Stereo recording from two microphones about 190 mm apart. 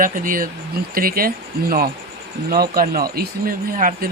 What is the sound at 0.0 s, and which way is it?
Speech, 45° right (ahead or behind).